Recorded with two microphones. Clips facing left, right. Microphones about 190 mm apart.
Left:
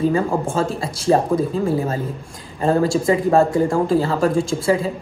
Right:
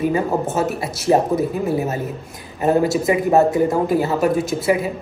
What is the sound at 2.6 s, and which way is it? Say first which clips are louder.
A woman's voice: even; 20° right (ahead or behind).